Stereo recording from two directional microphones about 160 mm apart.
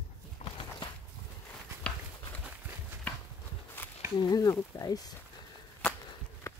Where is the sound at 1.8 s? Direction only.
5° left (ahead or behind).